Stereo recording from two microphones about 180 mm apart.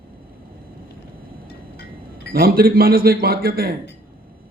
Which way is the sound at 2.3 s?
55° right (ahead or behind).